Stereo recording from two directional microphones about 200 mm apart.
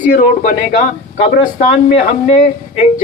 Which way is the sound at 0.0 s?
40° left (ahead or behind).